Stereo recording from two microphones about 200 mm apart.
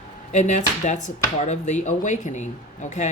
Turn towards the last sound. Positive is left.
turn(degrees=35)  # may be behind; listen again after turning